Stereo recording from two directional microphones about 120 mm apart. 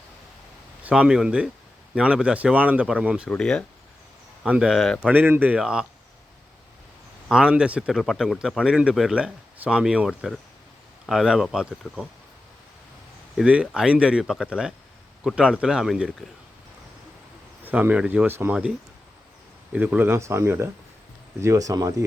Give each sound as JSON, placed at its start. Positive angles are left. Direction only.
{"t": 0.8, "sound": "speech", "side_deg": -10}
{"t": 3.2, "sound": "speech", "side_deg": 5}
{"t": 4.4, "sound": "speech", "side_deg": -10}
{"t": 5.0, "sound": "speech", "side_deg": -15}
{"t": 7.3, "sound": "speech", "side_deg": -10}
{"t": 13.3, "sound": "speech", "side_deg": -10}
{"t": 17.7, "sound": "speech", "side_deg": -15}
{"t": 19.7, "sound": "speech", "side_deg": -15}